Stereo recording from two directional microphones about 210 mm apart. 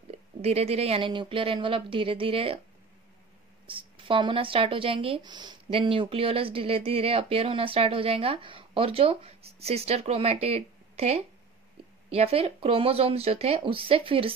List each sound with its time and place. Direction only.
0.1 s speech: 30° right (ahead or behind)
3.6 s speech: 25° right (ahead or behind)